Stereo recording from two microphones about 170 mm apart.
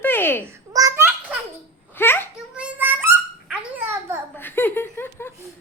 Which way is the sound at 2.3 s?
5° right (ahead or behind).